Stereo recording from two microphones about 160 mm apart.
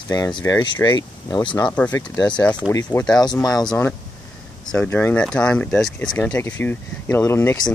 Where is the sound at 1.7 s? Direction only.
10° left (ahead or behind).